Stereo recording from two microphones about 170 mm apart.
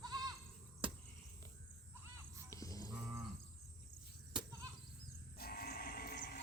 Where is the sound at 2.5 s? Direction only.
20° left (ahead or behind).